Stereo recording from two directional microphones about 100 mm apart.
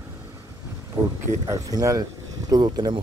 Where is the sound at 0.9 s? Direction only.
15° right (ahead or behind).